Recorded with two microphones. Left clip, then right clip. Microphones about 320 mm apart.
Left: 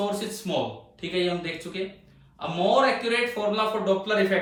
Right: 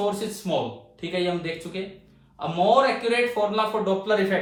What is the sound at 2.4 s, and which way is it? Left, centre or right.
Speech, centre.